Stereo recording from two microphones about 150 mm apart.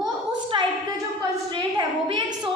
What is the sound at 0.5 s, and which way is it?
A woman's voice, 35° right (ahead or behind).